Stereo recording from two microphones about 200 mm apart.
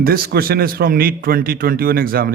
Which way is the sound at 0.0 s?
50° right (ahead or behind).